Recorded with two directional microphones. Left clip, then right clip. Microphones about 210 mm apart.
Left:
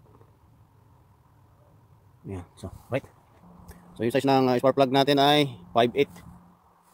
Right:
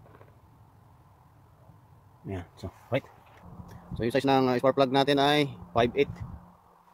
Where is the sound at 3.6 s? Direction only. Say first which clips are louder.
Left 3 dB; 25° left (ahead or behind).